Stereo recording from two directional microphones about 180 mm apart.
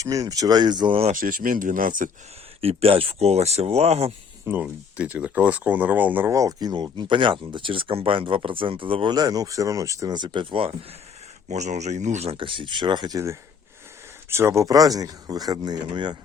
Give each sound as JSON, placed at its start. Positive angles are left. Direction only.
{"t": 0.0, "sound": "speech", "side_deg": -20}
{"t": 1.1, "sound": "speech", "side_deg": -50}
{"t": 2.6, "sound": "speech", "side_deg": -30}
{"t": 4.4, "sound": "speech", "side_deg": -10}
{"t": 11.4, "sound": "speech", "side_deg": -40}